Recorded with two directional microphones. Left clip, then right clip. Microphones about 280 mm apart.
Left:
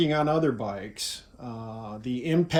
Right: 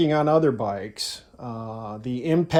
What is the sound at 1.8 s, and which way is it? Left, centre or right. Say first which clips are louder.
Speech: right 4 dB; right.